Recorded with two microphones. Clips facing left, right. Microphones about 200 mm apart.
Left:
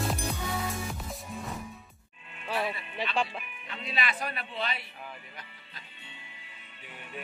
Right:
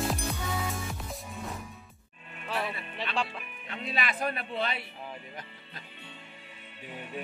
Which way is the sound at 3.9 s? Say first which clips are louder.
Right 2 dB; 50° right (ahead or behind).